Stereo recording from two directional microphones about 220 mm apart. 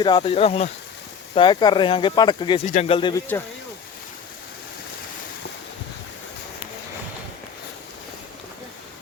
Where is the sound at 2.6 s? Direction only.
30° left (ahead or behind).